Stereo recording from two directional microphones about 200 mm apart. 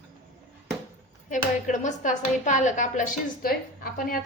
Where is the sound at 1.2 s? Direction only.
40° left (ahead or behind).